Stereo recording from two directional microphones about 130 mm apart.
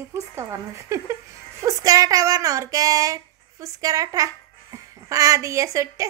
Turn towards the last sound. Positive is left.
turn(degrees=-25)  # may be behind; listen again after turning